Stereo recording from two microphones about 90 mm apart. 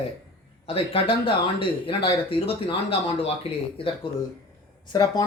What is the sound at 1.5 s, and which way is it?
Speech, 80° left.